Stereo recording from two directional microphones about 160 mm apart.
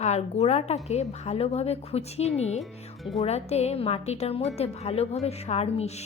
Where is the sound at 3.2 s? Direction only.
40° left (ahead or behind).